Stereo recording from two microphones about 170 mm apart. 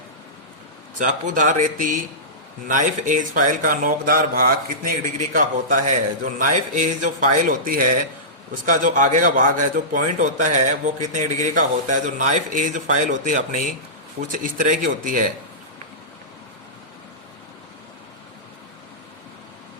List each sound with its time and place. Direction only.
0.9 s speech: 50° right (ahead or behind)